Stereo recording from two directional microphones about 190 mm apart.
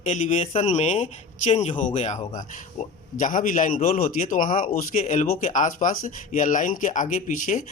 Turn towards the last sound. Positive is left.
turn(degrees=40)  # may be behind; listen again after turning